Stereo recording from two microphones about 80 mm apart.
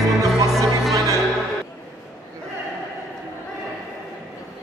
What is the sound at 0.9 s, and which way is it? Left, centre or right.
Music, right.